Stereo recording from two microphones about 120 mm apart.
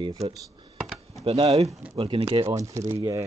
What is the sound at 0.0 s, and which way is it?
Speech, 30° right (ahead or behind).